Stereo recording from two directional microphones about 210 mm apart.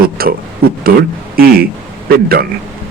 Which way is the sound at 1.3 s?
45° right (ahead or behind).